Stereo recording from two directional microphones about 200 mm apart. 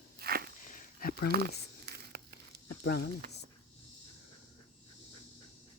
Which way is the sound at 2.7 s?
55° left (ahead or behind).